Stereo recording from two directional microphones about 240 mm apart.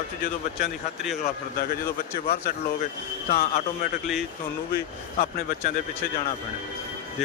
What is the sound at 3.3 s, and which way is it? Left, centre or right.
Speech, left.